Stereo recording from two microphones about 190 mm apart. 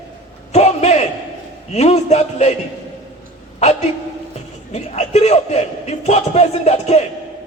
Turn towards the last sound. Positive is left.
turn(degrees=35)  # may be behind; listen again after turning